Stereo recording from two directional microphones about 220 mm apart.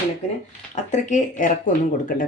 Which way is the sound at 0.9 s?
35° left (ahead or behind).